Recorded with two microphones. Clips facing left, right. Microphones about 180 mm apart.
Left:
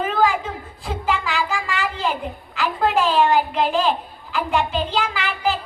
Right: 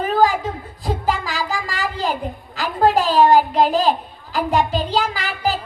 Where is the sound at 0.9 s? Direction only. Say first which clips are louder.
Right 2 dB; 40° right (ahead or behind).